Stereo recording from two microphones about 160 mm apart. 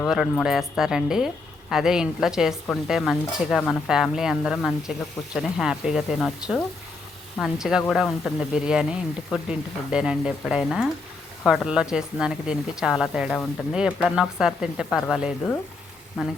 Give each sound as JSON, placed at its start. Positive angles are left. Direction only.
{"t": 0.0, "sound": "a woman's voice", "side_deg": 0}